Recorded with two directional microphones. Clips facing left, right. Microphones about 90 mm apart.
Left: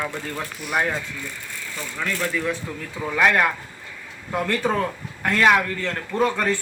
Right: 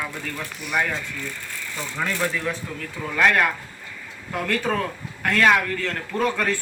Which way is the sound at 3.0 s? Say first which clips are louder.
Left 1 dB; 10° left (ahead or behind).